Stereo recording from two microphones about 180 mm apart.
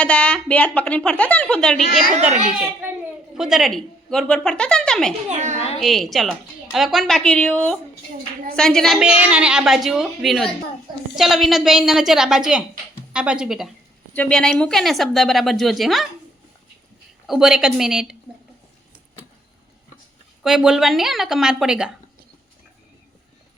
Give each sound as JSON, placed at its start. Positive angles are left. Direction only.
{"t": 0.0, "sound": "a woman's voice", "side_deg": 5}
{"t": 3.3, "sound": "a woman's voice", "side_deg": 0}
{"t": 5.3, "sound": "a woman's voice", "side_deg": -40}
{"t": 5.5, "sound": "a sound", "side_deg": 35}
{"t": 5.8, "sound": "a woman's voice", "side_deg": 0}
{"t": 17.2, "sound": "a woman's voice", "side_deg": -5}
{"t": 20.4, "sound": "a woman's voice", "side_deg": -5}